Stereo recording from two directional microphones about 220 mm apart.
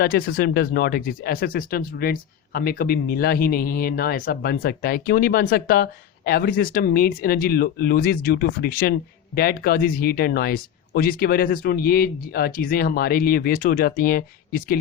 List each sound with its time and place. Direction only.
0.0 s speech: 45° left (ahead or behind)